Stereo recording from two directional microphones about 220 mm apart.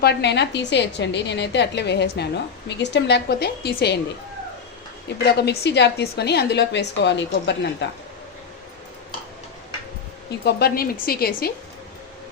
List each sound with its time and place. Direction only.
0.0 s a woman's voice: 50° left (ahead or behind)
5.0 s a woman's voice: 50° left (ahead or behind)
10.4 s a woman's voice: 45° left (ahead or behind)